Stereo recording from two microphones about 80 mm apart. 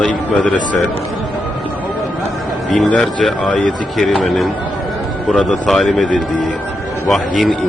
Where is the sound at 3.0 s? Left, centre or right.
Centre.